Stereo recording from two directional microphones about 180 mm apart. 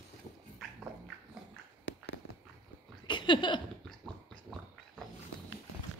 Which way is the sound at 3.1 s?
25° left (ahead or behind).